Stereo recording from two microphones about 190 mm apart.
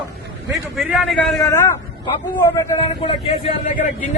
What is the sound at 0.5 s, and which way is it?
Speech, centre (ahead or behind).